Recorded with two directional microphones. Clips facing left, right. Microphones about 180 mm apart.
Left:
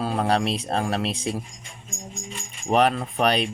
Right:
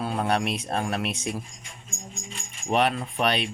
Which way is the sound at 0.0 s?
35° left (ahead or behind).